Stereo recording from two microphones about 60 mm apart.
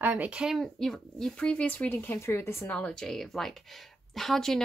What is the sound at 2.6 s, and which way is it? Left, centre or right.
Speech, centre.